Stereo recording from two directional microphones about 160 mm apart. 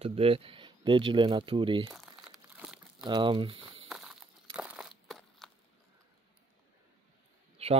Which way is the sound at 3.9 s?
5° right (ahead or behind).